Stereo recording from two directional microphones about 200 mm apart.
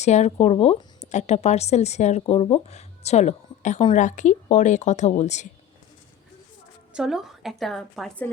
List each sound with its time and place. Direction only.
0.0 s a woman's voice: 35° left (ahead or behind)
6.9 s a woman's voice: centre (ahead or behind)